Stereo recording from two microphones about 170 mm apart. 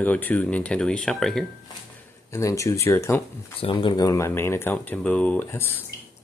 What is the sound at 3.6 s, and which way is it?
Speech, 30° left (ahead or behind).